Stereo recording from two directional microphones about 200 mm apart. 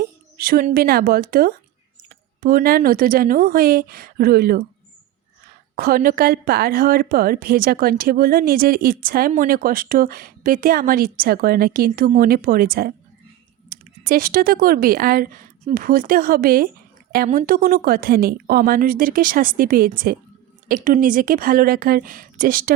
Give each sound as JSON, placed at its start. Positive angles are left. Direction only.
{"t": 0.0, "sound": "a woman's voice", "side_deg": -50}
{"t": 5.7, "sound": "a woman's voice", "side_deg": -45}